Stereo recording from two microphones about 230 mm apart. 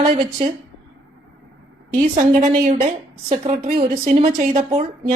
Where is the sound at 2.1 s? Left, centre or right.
Right.